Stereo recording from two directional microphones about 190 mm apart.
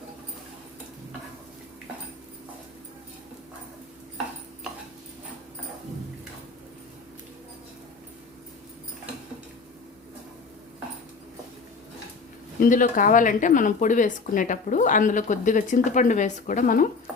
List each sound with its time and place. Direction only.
12.5 s a woman's voice: 45° left (ahead or behind)